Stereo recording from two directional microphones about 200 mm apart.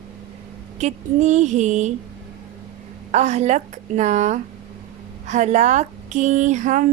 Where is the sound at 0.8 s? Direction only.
35° right (ahead or behind).